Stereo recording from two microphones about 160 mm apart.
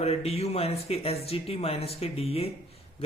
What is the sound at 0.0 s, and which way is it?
A man's voice, 40° left (ahead or behind).